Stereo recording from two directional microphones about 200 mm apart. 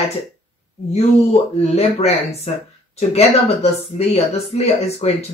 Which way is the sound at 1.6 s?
30° left (ahead or behind).